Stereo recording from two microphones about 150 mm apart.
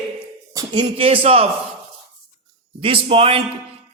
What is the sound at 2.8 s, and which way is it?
Speech, 40° right (ahead or behind).